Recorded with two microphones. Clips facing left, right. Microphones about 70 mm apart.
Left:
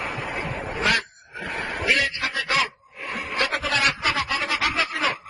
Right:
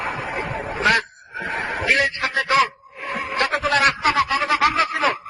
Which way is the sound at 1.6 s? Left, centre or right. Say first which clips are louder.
Right 2 dB; right.